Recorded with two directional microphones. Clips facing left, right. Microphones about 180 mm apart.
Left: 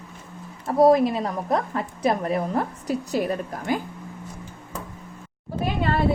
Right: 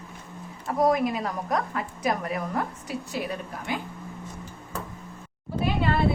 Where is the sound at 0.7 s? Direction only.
30° left (ahead or behind).